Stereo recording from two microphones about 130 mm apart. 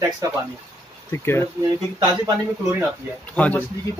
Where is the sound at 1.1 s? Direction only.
20° left (ahead or behind).